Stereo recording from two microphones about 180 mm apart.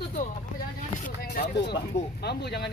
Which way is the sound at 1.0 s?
55° left (ahead or behind).